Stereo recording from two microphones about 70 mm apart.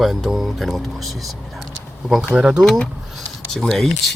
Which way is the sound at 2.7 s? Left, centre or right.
Centre.